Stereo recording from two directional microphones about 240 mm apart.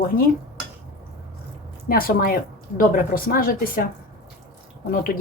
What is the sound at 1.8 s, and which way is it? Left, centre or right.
Speech, left.